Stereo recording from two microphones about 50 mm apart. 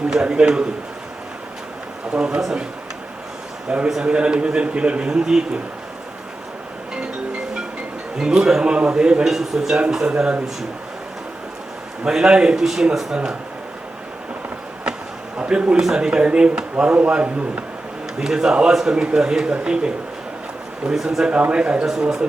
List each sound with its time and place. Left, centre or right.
0.1 s a man's voice: centre
2.1 s speech: centre
3.8 s speech: centre
4.1 s a man's voice: centre
8.2 s speech: centre
12.0 s speech: centre
15.4 s a man's voice: right
18.2 s a man's voice: centre
20.9 s speech: centre
21.2 s a man's voice: right